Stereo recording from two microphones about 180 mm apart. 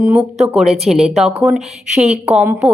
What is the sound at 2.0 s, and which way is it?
Speech, 40° right (ahead or behind).